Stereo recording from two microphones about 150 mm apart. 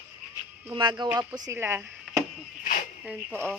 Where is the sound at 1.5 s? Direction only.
15° right (ahead or behind).